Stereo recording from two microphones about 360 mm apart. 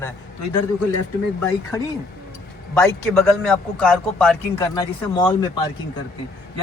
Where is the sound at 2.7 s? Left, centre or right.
Centre.